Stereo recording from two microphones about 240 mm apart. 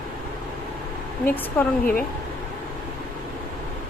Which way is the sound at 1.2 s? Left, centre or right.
Centre.